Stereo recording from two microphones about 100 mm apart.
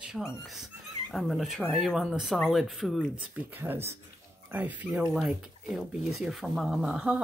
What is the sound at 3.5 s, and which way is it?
Speech, 20° right (ahead or behind).